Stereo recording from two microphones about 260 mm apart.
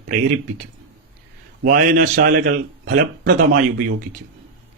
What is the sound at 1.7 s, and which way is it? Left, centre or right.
Speech, right.